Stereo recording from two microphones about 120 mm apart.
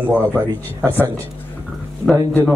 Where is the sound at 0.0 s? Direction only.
15° right (ahead or behind).